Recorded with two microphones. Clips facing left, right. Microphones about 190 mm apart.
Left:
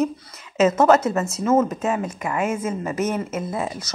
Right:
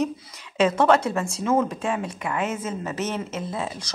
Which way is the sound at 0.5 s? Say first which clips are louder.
Left 3 dB; 5° left (ahead or behind).